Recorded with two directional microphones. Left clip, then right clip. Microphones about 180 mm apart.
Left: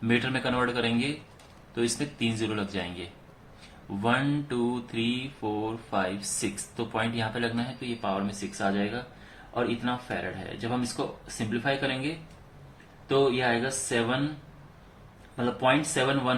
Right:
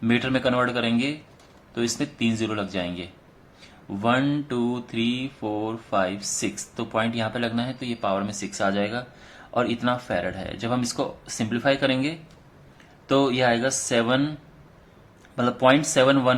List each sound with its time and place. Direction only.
0.0 s mantra: 40° right (ahead or behind)
4.0 s mantra: 40° right (ahead or behind); by 9.0 s 55° right (ahead or behind)
9.6 s speech: 55° right (ahead or behind)
13.1 s speech: 55° right (ahead or behind)
15.4 s speech: 55° right (ahead or behind)